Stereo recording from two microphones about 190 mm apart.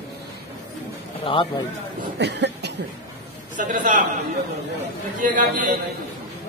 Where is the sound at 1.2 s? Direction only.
25° left (ahead or behind).